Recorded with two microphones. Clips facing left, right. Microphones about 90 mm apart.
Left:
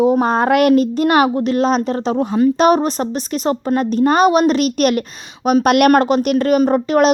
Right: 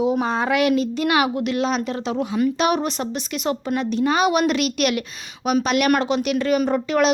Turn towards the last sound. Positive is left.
turn(degrees=45)  # may be behind; listen again after turning